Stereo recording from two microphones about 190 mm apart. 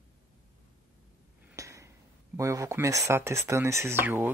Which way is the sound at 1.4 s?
15° right (ahead or behind).